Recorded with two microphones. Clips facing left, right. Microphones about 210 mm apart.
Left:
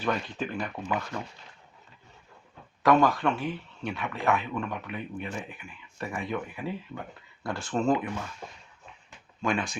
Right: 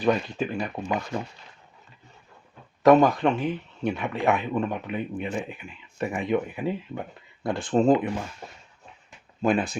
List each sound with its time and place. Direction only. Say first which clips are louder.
0.0 s speech: right 6 dB; 15° right (ahead or behind)
2.8 s speech: right 5 dB; 20° right (ahead or behind)
7.8 s speech: right 6 dB; 30° right (ahead or behind)
9.4 s speech: right 6 dB; 35° right (ahead or behind)